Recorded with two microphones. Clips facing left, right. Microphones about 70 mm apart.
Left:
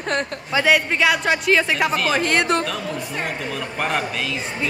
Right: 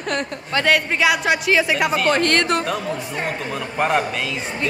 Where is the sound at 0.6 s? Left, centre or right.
Centre.